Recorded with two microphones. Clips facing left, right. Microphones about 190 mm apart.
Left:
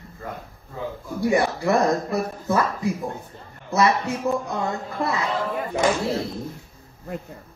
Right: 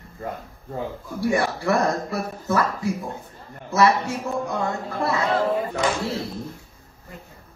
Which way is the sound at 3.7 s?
20° left (ahead or behind).